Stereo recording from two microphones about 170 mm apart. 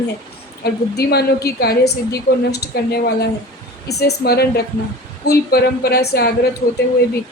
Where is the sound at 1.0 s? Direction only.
70° left (ahead or behind).